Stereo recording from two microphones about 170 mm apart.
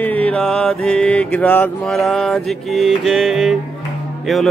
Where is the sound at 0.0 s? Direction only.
10° left (ahead or behind).